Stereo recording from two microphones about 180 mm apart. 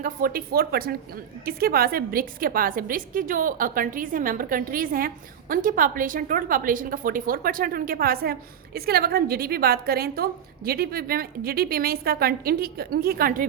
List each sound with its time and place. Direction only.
0.0 s a woman's voice: 55° right (ahead or behind)